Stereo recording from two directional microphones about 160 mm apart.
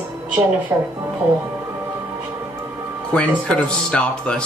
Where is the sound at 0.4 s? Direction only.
15° right (ahead or behind).